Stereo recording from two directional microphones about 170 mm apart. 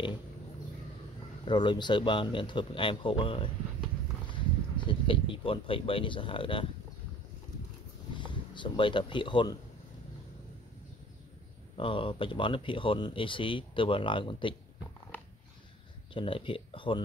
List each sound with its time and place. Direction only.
1.4 s speech: 25° left (ahead or behind)
8.2 s speech: 30° left (ahead or behind)
11.7 s speech: 30° left (ahead or behind)
16.1 s speech: 30° left (ahead or behind)